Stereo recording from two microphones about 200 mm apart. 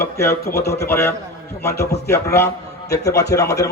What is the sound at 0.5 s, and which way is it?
Speech, 55° left (ahead or behind).